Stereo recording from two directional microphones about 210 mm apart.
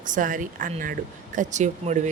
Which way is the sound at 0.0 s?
40° right (ahead or behind).